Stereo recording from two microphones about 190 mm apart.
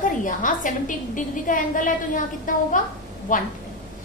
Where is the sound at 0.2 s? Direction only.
45° left (ahead or behind).